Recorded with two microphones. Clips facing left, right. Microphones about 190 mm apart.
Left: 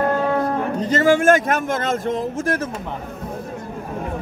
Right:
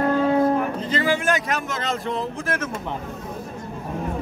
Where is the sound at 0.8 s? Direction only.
45° left (ahead or behind).